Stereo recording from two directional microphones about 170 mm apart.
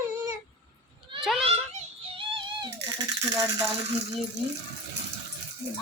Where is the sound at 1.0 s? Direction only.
Centre (ahead or behind).